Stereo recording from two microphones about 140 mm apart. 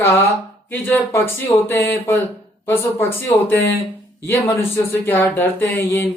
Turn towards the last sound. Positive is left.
turn(degrees=15)  # may be behind; listen again after turning